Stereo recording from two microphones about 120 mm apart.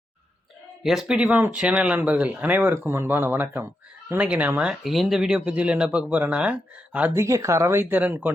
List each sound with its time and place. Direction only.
0.8 s speech: 5° right (ahead or behind)
7.2 s speech: 25° right (ahead or behind)